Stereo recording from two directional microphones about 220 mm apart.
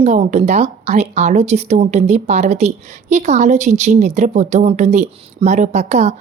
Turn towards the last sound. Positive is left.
turn(degrees=-30)  # may be behind; listen again after turning